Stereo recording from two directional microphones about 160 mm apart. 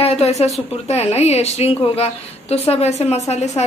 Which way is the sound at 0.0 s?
40° left (ahead or behind).